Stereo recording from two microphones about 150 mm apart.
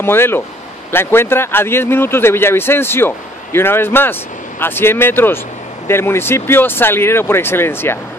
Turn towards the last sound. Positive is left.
turn(degrees=15)  # may be behind; listen again after turning